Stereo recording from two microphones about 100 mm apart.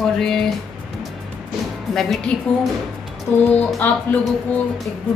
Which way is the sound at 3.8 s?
20° left (ahead or behind).